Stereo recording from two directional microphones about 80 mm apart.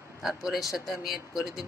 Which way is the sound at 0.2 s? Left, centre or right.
Centre.